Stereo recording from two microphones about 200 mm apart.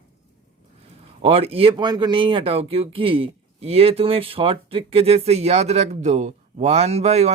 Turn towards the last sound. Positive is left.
turn(degrees=-35)  # may be behind; listen again after turning